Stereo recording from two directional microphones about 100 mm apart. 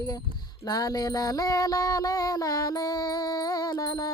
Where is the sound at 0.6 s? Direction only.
40° left (ahead or behind).